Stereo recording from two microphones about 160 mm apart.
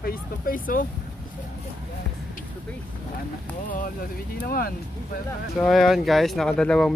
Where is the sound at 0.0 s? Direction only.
65° left (ahead or behind).